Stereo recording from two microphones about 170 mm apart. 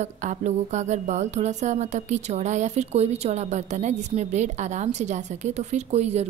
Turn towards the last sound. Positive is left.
turn(degrees=-40)  # may be behind; listen again after turning